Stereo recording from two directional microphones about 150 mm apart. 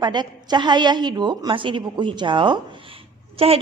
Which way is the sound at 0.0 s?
30° right (ahead or behind).